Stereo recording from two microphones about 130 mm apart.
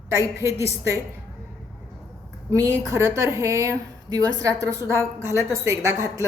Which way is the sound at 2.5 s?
25° right (ahead or behind).